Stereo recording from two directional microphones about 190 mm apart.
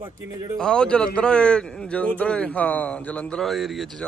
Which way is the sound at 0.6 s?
5° left (ahead or behind).